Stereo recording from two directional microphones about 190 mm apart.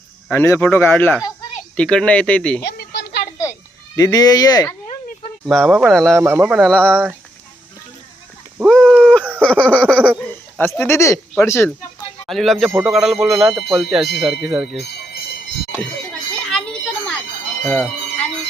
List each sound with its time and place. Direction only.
0.3 s speech: 10° left (ahead or behind)
2.6 s a sound: 65° left (ahead or behind)
3.9 s speech: 20° left (ahead or behind)
5.5 s speech: centre (ahead or behind)
6.1 s speech: 15° right (ahead or behind)
6.7 s speech: 5° left (ahead or behind)
8.5 s a sound: centre (ahead or behind)
9.4 s speech: 5° left (ahead or behind)
12.3 s speech: centre (ahead or behind)
16.3 s a sound: 5° left (ahead or behind)
17.7 s bell: 5° left (ahead or behind)